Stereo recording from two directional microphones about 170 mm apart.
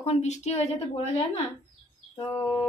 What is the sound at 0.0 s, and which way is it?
Speech, 40° left (ahead or behind).